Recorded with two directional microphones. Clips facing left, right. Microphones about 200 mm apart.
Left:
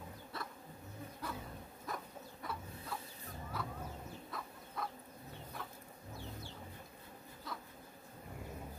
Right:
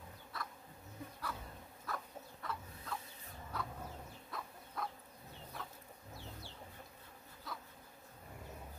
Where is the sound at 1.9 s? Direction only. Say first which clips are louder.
Even; 15° left (ahead or behind).